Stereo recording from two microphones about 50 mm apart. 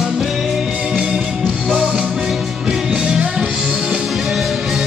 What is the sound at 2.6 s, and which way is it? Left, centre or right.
Music, centre.